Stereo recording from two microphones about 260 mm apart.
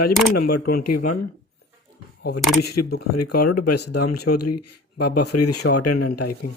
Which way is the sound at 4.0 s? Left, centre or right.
Left.